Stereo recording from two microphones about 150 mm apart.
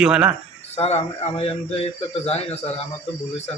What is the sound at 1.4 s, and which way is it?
Speech, 45° left (ahead or behind).